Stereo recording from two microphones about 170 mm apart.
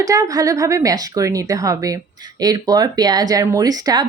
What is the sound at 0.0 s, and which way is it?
Speech, 20° right (ahead or behind).